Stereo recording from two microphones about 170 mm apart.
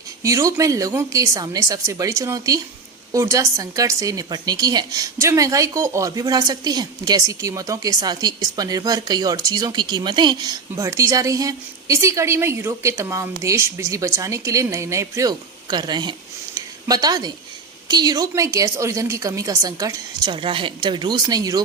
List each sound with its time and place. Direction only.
0.2 s a woman's voice: 20° right (ahead or behind)
16.6 s a sound: 20° right (ahead or behind)
17.8 s a woman's voice: 25° right (ahead or behind)